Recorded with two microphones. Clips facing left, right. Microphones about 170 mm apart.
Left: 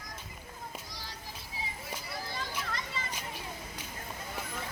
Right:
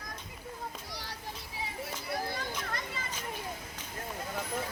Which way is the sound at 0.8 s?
65° right (ahead or behind).